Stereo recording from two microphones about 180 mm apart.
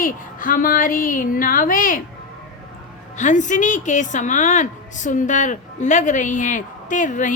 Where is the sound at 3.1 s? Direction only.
45° left (ahead or behind).